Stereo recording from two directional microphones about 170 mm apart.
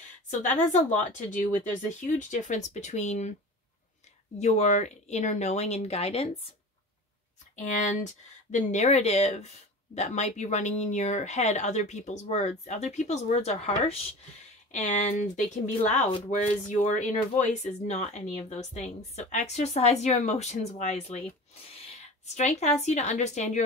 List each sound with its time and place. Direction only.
0.3 s speech: 45° left (ahead or behind)
4.4 s speech: 40° left (ahead or behind)
7.5 s a woman's voice: 45° left (ahead or behind)